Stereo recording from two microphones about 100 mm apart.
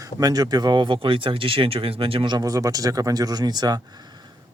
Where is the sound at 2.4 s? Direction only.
35° right (ahead or behind).